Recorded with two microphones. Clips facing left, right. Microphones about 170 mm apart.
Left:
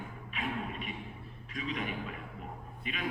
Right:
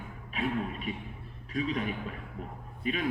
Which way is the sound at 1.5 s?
40° right (ahead or behind).